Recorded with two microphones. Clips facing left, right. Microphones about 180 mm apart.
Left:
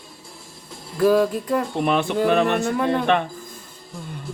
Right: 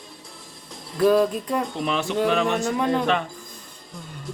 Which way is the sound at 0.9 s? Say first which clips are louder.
Left 1 dB; 5° left (ahead or behind).